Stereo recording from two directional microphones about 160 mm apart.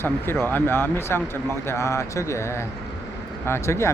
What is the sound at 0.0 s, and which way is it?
Speech, 15° left (ahead or behind).